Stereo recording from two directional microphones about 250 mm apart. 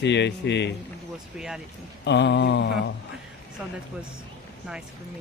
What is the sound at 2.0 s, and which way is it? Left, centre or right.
Speech, left.